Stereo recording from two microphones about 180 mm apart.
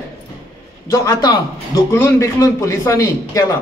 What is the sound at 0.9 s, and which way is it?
A man's voice, 20° left (ahead or behind).